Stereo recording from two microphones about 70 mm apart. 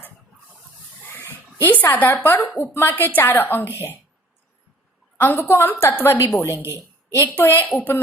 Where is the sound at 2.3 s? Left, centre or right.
Left.